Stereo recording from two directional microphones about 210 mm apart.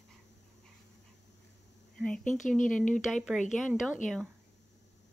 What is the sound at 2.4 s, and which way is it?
Speech, 35° left (ahead or behind).